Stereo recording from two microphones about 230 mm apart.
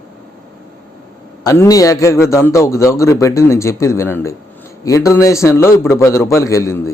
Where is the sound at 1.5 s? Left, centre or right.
Centre.